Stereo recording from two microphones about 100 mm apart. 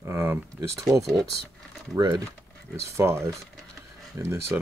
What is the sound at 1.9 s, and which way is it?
Speech, 45° right (ahead or behind).